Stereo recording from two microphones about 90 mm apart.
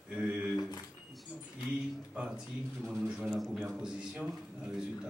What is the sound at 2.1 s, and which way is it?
Speech, 15° right (ahead or behind).